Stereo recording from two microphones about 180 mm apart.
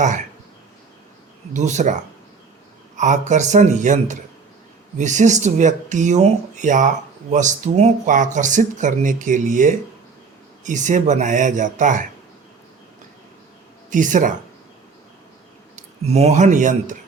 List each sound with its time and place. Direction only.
1.5 s speech: 40° right (ahead or behind)
3.0 s speech: 40° right (ahead or behind)
13.9 s speech: 45° right (ahead or behind)
15.7 s speech: 40° right (ahead or behind)